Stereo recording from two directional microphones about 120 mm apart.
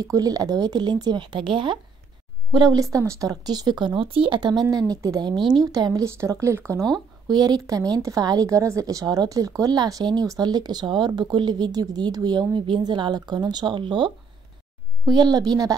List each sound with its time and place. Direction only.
0.0 s speech: 30° right (ahead or behind)
7.2 s speech: 35° right (ahead or behind)